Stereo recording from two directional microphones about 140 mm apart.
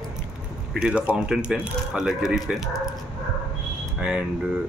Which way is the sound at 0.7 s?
10° right (ahead or behind).